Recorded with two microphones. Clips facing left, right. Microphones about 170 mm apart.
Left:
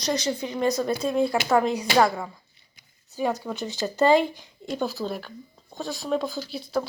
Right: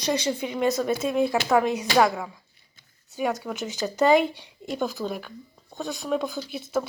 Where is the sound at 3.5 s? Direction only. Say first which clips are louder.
Even; 20° right (ahead or behind).